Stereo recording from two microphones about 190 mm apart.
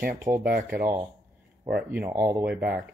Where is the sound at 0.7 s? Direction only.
10° right (ahead or behind).